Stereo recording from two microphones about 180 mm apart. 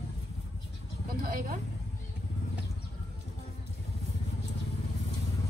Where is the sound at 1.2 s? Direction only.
50° right (ahead or behind).